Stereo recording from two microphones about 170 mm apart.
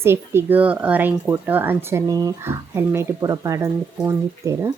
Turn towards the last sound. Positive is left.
turn(degrees=-15)  # may be behind; listen again after turning